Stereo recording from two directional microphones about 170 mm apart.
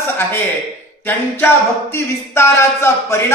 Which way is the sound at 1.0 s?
10° left (ahead or behind).